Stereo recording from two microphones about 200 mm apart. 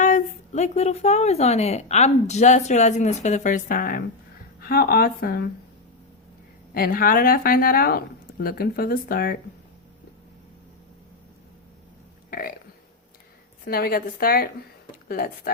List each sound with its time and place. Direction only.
0.0 s speech: 35° left (ahead or behind)
6.7 s speech: 45° left (ahead or behind)
12.3 s burping: 45° left (ahead or behind)
13.7 s speech: 50° left (ahead or behind)